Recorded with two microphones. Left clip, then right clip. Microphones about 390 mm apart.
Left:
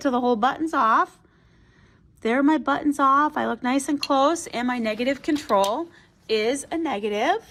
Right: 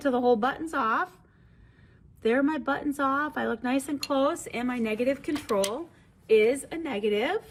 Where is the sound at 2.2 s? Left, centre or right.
Left.